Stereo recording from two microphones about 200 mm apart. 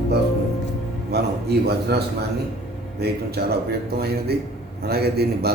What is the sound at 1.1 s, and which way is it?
Speech, 55° right (ahead or behind).